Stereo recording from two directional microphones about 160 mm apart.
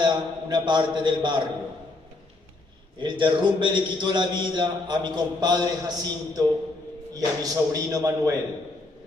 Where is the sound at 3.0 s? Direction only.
30° right (ahead or behind).